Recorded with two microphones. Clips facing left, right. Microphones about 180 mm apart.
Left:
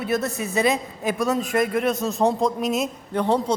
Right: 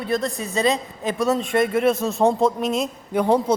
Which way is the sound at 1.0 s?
5° left (ahead or behind).